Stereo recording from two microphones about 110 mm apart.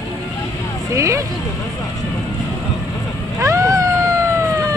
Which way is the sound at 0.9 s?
30° right (ahead or behind).